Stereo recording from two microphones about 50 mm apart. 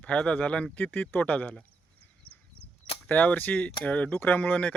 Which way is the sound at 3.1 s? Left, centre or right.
Left.